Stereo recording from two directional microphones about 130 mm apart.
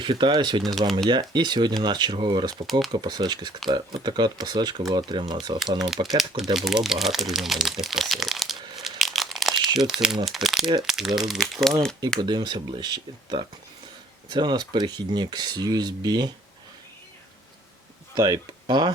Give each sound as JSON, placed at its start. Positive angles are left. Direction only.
{"t": 0.0, "sound": "speech", "side_deg": -35}
{"t": 0.6, "sound": "speech", "side_deg": 0}
{"t": 0.9, "sound": "speech", "side_deg": -35}
{"t": 2.6, "sound": "speech", "side_deg": 0}
{"t": 2.9, "sound": "speech", "side_deg": -35}
{"t": 6.1, "sound": "speech", "side_deg": 0}
{"t": 8.8, "sound": "crumpling", "side_deg": 0}
{"t": 10.2, "sound": "speech", "side_deg": 0}
{"t": 12.2, "sound": "speech", "side_deg": -35}
{"t": 18.1, "sound": "speech", "side_deg": -30}